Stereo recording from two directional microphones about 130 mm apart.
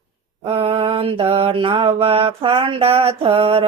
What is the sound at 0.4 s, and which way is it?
Mantra, 50° right (ahead or behind).